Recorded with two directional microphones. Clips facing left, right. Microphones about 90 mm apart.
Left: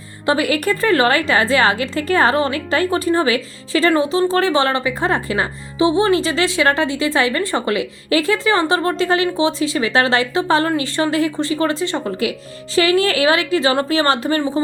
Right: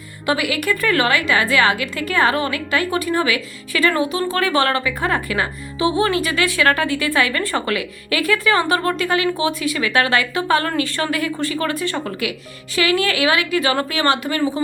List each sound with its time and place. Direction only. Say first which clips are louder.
0.3 s a woman's voice: left 3 dB; 35° left (ahead or behind)